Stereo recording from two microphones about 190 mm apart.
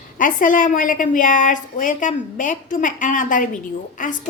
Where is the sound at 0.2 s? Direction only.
45° left (ahead or behind).